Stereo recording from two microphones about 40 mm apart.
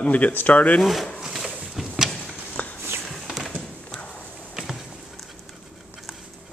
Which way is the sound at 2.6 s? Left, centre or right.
Left.